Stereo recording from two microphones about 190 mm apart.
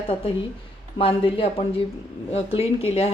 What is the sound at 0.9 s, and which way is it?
A woman's voice, 30° left (ahead or behind).